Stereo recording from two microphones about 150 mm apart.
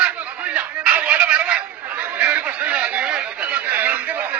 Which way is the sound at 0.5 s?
10° right (ahead or behind).